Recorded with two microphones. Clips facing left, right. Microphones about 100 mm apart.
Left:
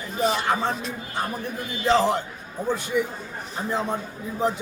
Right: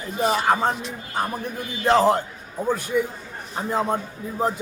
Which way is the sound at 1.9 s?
45° right (ahead or behind).